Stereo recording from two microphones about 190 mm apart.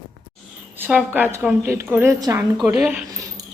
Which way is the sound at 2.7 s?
5° right (ahead or behind).